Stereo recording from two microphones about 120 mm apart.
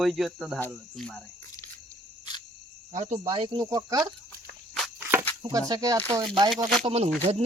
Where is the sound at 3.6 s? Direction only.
30° right (ahead or behind).